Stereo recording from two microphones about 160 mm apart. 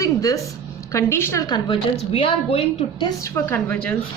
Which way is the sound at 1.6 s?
35° left (ahead or behind).